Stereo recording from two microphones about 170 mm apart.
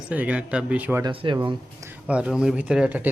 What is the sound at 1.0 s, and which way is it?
Speech, 25° right (ahead or behind).